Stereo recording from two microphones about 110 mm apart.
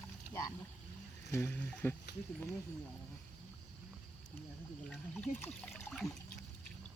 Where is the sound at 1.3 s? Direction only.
25° left (ahead or behind).